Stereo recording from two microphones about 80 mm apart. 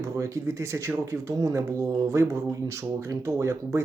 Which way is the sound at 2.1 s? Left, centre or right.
Right.